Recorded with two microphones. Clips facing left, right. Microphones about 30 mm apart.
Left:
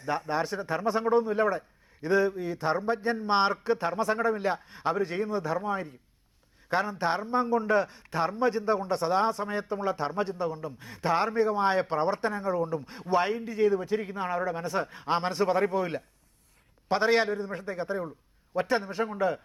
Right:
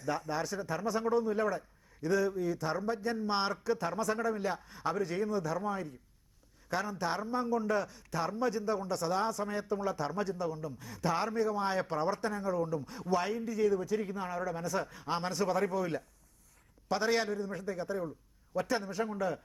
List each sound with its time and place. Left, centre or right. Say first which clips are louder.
0.0 s a man's voice: left 5 dB; left